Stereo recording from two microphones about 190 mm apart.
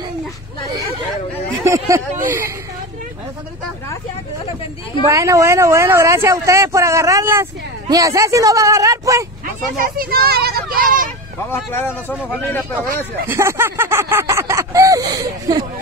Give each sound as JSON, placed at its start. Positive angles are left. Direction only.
{"t": 1.6, "sound": "speech", "side_deg": -15}
{"t": 5.0, "sound": "speech", "side_deg": -15}
{"t": 9.8, "sound": "a child's voice", "side_deg": -50}
{"t": 11.5, "sound": "speech", "side_deg": 10}
{"t": 12.8, "sound": "a child's voice", "side_deg": -50}
{"t": 13.3, "sound": "speech", "side_deg": -15}